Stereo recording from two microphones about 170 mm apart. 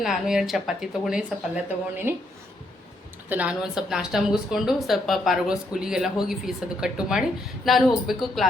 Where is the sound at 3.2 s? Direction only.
10° right (ahead or behind).